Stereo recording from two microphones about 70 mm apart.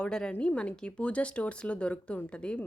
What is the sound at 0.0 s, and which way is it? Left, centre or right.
Speech, centre.